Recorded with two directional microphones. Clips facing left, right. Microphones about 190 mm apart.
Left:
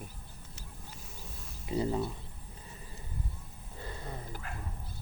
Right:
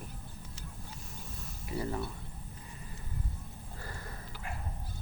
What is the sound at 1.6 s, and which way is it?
Speech, 20° left (ahead or behind).